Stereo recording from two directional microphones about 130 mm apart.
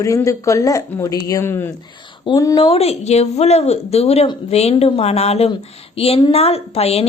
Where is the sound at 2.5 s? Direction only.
45° left (ahead or behind).